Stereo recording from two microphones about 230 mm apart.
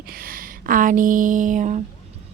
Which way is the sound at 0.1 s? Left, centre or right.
Right.